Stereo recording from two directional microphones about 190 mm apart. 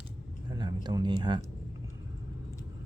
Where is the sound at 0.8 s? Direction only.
20° right (ahead or behind).